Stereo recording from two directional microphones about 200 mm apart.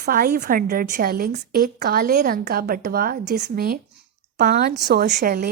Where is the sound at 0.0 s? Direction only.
45° right (ahead or behind).